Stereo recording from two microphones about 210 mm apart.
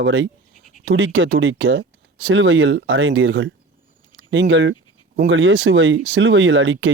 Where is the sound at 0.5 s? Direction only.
35° left (ahead or behind).